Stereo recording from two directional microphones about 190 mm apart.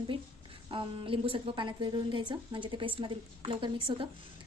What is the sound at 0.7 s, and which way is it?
A woman's voice, 25° right (ahead or behind).